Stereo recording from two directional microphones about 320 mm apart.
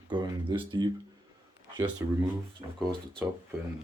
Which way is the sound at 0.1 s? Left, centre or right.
Centre.